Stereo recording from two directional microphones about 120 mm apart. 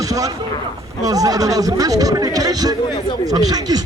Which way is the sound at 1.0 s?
30° right (ahead or behind).